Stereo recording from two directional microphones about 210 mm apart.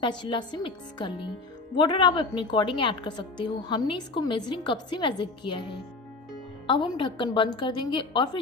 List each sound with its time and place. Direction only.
0.0 s a woman's voice: 20° left (ahead or behind)